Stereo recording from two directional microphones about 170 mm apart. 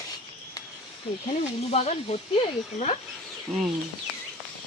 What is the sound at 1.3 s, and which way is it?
Speech, 40° left (ahead or behind).